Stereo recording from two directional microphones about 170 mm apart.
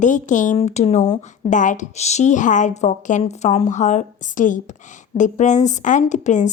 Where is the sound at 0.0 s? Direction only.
45° left (ahead or behind).